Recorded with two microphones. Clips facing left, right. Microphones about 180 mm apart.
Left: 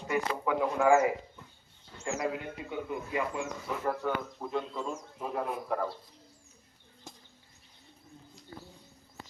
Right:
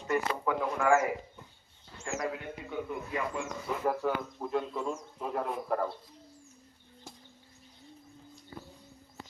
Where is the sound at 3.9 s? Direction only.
5° right (ahead or behind).